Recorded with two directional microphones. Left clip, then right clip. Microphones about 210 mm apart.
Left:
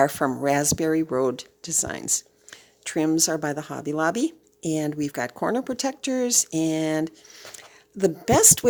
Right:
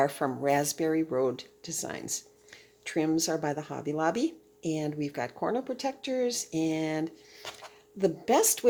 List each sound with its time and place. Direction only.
0.0 s speech: 35° left (ahead or behind)